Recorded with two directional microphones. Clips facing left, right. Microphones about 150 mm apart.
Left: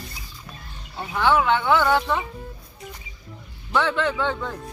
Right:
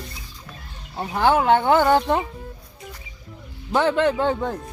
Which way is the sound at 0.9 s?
35° right (ahead or behind).